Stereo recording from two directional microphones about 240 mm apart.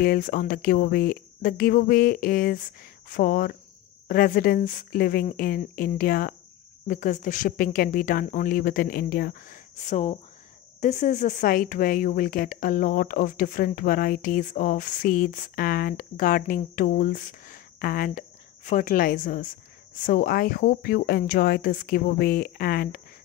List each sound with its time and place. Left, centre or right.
0.0 s speech: left